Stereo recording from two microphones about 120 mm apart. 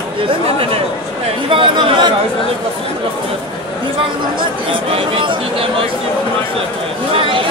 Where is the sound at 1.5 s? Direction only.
45° right (ahead or behind).